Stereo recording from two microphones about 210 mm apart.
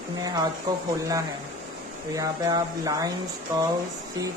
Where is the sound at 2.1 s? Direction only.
15° right (ahead or behind).